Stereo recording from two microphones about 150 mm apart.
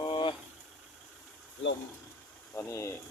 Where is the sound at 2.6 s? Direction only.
20° left (ahead or behind).